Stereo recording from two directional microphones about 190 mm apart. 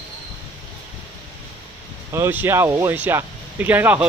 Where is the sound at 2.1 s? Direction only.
10° right (ahead or behind).